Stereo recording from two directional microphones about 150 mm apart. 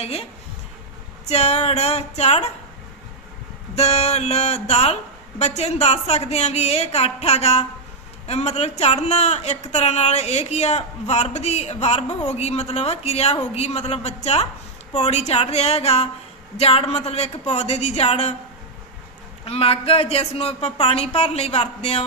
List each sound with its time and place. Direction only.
0.0 s speech: 45° left (ahead or behind)
1.3 s speech: 45° left (ahead or behind)
3.8 s speech: 45° left (ahead or behind)
19.5 s speech: 40° left (ahead or behind)